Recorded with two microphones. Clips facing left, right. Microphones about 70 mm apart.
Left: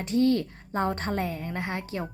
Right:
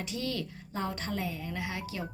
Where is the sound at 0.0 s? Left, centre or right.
Left.